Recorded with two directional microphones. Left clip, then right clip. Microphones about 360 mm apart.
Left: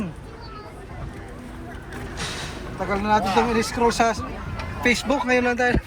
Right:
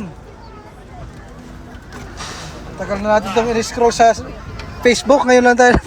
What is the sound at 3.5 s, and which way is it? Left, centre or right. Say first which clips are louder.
Speech: right 6 dB; centre.